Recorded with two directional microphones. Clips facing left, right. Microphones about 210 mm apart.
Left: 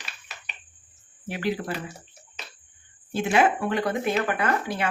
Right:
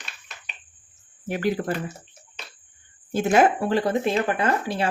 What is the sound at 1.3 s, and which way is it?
Speech, 45° right (ahead or behind).